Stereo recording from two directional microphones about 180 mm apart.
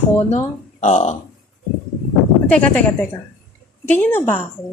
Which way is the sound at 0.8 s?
40° left (ahead or behind).